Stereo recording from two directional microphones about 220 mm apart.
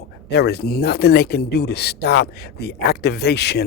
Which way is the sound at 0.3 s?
50° left (ahead or behind).